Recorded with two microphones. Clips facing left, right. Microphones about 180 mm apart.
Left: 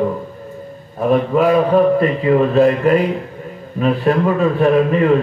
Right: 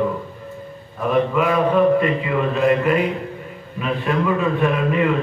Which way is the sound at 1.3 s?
40° left (ahead or behind).